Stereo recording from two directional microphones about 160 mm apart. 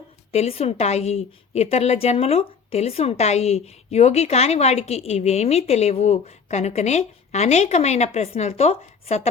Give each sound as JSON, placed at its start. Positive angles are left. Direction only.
{"t": 0.3, "sound": "a woman's voice", "side_deg": 40}